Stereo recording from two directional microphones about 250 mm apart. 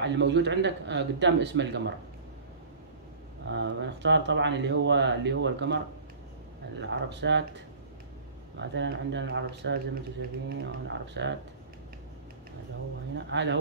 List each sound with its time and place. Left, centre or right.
0.0 s speech: right
3.4 s speech: right
6.8 s speech: right
13.1 s speech: right